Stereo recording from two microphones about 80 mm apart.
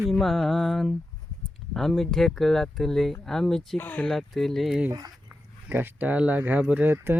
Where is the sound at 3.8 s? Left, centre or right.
Left.